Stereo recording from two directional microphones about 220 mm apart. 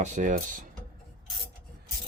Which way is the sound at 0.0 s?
35° right (ahead or behind).